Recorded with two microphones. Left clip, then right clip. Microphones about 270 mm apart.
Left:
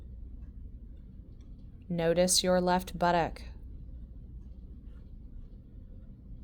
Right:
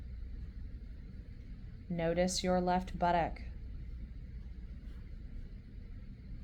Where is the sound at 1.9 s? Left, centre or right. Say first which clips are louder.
Left 7 dB; left.